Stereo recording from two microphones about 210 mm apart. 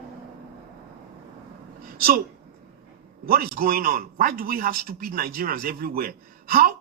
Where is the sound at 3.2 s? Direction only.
45° right (ahead or behind).